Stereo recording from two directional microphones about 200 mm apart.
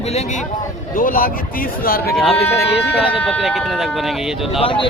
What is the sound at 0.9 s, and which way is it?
Speech, 45° left (ahead or behind).